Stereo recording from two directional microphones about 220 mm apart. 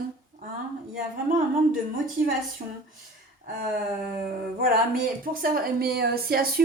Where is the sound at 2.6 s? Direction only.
35° right (ahead or behind).